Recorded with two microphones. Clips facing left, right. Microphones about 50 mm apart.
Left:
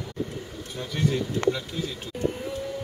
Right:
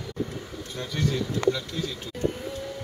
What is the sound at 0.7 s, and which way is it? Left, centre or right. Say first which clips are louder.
A man's voice: left 2 dB; left.